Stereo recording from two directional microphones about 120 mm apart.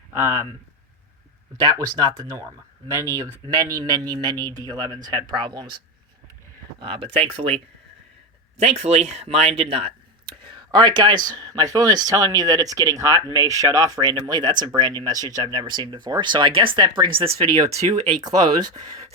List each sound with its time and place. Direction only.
1.5 s a man's voice: 35° right (ahead or behind)
6.7 s a man's voice: 45° right (ahead or behind)
18.1 s a man's voice: 35° right (ahead or behind)